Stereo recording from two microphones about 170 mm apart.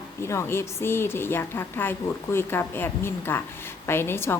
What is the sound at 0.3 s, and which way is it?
A woman's voice, 15° left (ahead or behind).